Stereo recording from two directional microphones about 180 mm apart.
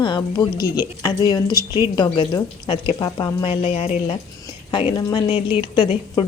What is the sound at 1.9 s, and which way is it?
Speech, 25° left (ahead or behind).